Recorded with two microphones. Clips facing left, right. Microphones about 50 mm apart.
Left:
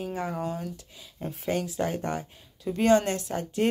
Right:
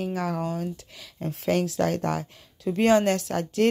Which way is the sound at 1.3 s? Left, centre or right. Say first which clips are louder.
Right 5 dB; right.